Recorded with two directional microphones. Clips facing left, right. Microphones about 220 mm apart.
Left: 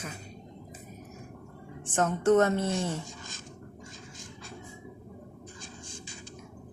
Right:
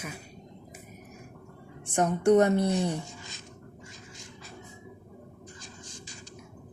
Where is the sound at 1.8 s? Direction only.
15° right (ahead or behind).